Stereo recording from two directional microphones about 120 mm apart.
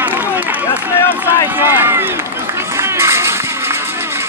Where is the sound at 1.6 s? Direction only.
20° right (ahead or behind).